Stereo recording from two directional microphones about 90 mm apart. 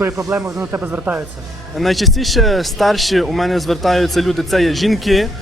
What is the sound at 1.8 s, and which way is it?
Speech, centre (ahead or behind).